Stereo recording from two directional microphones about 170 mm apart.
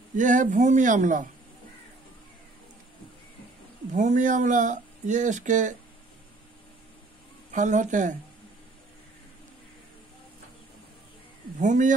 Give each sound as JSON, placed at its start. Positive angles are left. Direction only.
{"t": 0.1, "sound": "speech", "side_deg": -50}
{"t": 3.9, "sound": "speech", "side_deg": -45}
{"t": 7.5, "sound": "speech", "side_deg": -45}
{"t": 11.6, "sound": "speech", "side_deg": -45}